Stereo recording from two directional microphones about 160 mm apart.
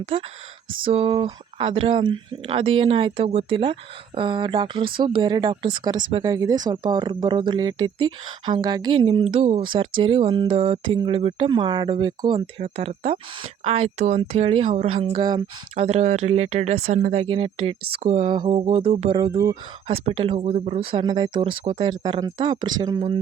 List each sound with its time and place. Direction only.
0.0 s speech: 35° right (ahead or behind)
9.2 s speech: 40° right (ahead or behind)
9.6 s speech: 30° right (ahead or behind)